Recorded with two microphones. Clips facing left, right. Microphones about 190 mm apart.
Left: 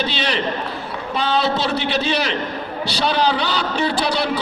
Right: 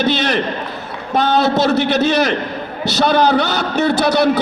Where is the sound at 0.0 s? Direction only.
45° right (ahead or behind).